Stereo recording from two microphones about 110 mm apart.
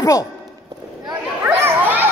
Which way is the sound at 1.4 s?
15° right (ahead or behind).